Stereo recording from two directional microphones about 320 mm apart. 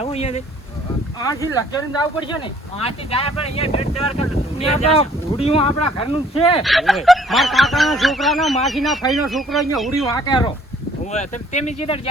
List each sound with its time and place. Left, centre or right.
0.0 s speech: centre
6.6 s speech: centre
10.2 s speech: centre